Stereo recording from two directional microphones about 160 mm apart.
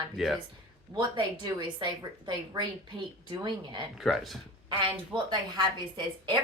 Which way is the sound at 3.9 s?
Centre (ahead or behind).